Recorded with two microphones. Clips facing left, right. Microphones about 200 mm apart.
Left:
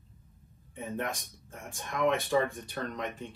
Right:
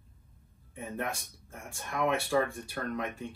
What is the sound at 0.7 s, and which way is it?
Speech, centre (ahead or behind).